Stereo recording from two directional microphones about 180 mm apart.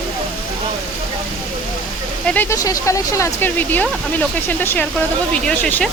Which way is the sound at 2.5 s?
20° left (ahead or behind).